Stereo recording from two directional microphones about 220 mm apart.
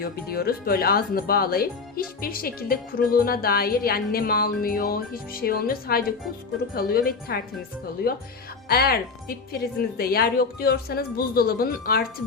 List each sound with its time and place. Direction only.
0.0 s speech: 45° left (ahead or behind)